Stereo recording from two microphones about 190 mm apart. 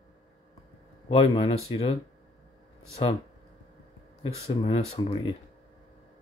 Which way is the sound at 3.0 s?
25° left (ahead or behind).